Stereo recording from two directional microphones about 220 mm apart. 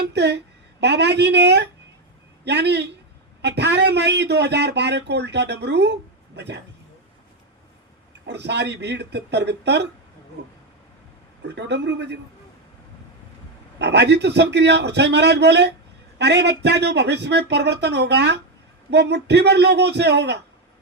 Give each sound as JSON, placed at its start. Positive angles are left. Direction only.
{"t": 0.1, "sound": "a woman's voice", "side_deg": -50}
{"t": 8.3, "sound": "a man's voice", "side_deg": -50}
{"t": 11.4, "sound": "a man's voice", "side_deg": -50}
{"t": 13.7, "sound": "a man's voice", "side_deg": -50}